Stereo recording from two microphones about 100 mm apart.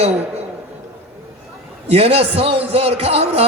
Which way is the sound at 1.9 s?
90° right.